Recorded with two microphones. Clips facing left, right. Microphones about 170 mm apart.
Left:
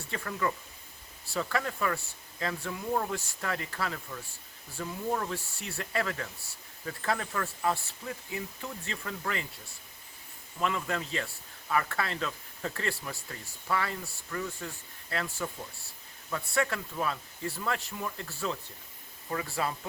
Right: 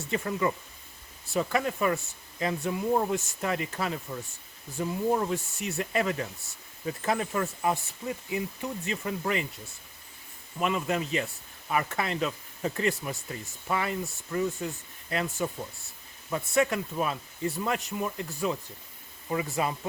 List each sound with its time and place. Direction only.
0.1 s speech: 20° right (ahead or behind)
10.6 s speech: 20° right (ahead or behind)